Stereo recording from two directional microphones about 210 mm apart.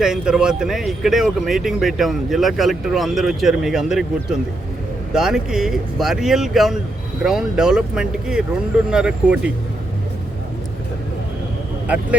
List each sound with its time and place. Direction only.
0.0 s speech: 5° right (ahead or behind)